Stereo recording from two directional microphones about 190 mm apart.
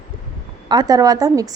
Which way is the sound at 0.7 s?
20° right (ahead or behind).